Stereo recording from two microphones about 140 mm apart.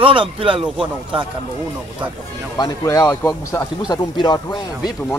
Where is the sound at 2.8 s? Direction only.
20° left (ahead or behind).